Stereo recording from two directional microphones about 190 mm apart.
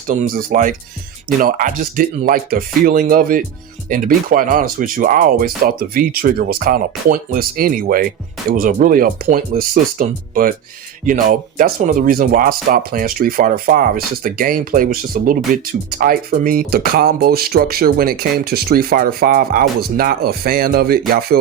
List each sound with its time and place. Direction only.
0.1 s speech: 40° right (ahead or behind)